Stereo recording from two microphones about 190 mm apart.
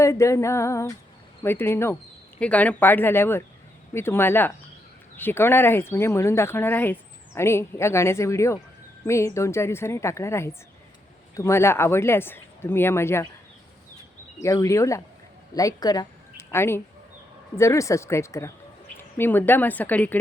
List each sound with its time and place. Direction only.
0.0 s speech: 15° left (ahead or behind)
14.4 s a woman's voice: 15° left (ahead or behind)